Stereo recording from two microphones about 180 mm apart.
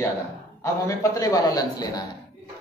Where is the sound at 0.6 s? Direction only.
15° left (ahead or behind).